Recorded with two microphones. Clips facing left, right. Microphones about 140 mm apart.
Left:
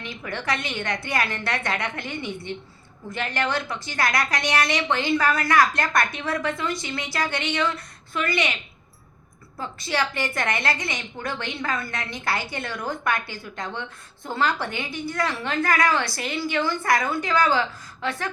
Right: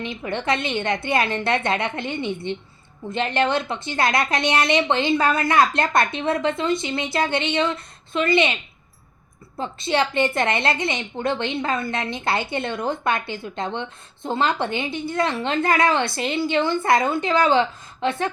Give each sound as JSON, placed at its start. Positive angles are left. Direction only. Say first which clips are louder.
{"t": 0.0, "sound": "a woman's voice", "louder": "right 5 dB", "side_deg": -20}
{"t": 9.6, "sound": "a woman's voice", "louder": "right 5 dB", "side_deg": -25}